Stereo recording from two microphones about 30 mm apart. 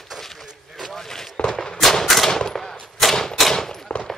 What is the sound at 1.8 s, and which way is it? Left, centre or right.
Gunshot, centre.